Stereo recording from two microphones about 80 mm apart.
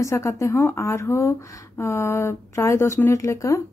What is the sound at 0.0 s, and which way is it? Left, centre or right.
Speech, left.